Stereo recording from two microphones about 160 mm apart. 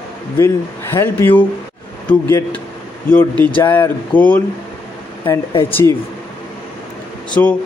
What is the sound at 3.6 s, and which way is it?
Speech, 15° left (ahead or behind).